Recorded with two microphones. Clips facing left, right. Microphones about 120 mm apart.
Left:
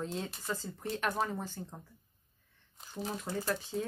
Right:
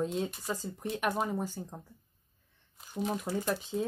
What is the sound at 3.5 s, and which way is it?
Speech, 20° right (ahead or behind).